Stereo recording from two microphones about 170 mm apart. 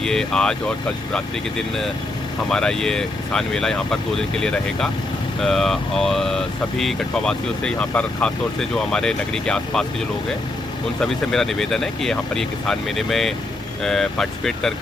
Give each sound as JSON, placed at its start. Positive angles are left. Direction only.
{"t": 0.0, "sound": "speech", "side_deg": 5}
{"t": 2.5, "sound": "speech", "side_deg": 5}
{"t": 11.0, "sound": "speech", "side_deg": 0}